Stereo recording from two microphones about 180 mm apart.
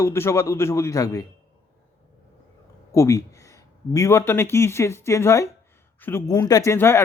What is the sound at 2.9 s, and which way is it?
Speech, 15° left (ahead or behind).